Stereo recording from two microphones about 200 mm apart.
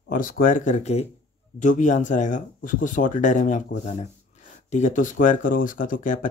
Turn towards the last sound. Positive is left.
turn(degrees=45)  # may be behind; listen again after turning